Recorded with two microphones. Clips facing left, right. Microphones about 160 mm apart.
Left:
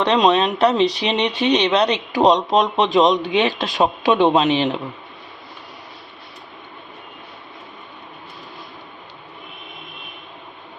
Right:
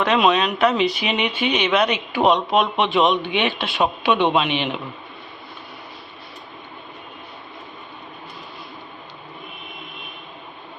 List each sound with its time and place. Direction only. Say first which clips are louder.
0.0 s speech: left 2 dB; 35° left (ahead or behind)